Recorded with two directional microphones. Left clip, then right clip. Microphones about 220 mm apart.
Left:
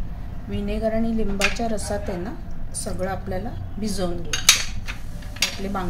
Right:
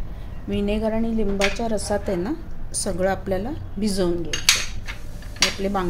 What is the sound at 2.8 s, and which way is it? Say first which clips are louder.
Speech: right 5 dB; 45° right (ahead or behind).